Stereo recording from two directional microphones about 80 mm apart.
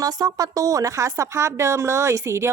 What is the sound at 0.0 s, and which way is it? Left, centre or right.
A woman's voice, right.